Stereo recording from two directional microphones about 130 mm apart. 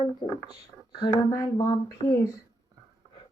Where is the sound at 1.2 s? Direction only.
25° left (ahead or behind).